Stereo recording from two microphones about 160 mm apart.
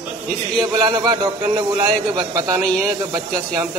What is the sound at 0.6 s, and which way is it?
A man's voice, 25° right (ahead or behind).